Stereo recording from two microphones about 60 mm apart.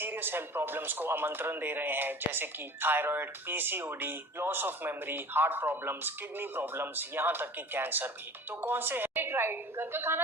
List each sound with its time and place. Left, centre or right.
0.0 s speech: right